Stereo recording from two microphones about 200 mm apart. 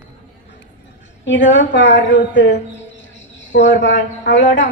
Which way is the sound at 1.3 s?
65° left (ahead or behind).